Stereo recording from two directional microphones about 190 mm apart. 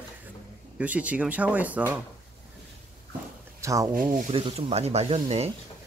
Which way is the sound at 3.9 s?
45° right (ahead or behind).